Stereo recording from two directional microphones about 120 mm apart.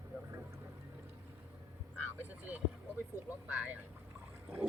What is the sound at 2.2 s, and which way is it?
Speech, 15° right (ahead or behind).